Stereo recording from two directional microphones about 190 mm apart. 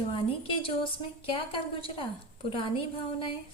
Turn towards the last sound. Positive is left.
turn(degrees=30)  # may be behind; listen again after turning